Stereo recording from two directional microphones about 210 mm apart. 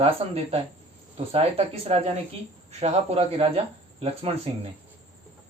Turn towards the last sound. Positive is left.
turn(degrees=-25)  # may be behind; listen again after turning